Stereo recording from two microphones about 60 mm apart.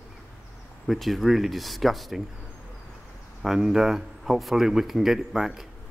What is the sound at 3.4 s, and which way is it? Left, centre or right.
Speech, centre.